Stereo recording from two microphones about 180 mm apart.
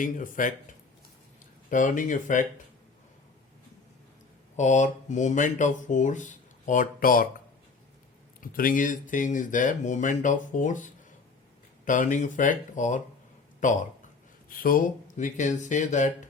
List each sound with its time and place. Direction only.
0.0 s speech: 50° left (ahead or behind)
4.5 s speech: 40° left (ahead or behind)
8.4 s speech: 50° left (ahead or behind)